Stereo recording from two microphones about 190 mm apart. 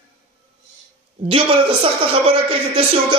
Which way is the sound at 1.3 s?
30° right (ahead or behind).